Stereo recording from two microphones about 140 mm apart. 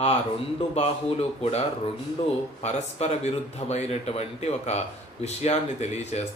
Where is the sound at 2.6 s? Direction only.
50° left (ahead or behind).